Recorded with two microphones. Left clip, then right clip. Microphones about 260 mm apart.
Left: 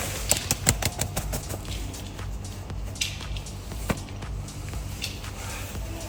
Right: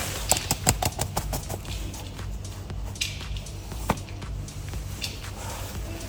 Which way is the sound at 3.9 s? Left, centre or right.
Centre.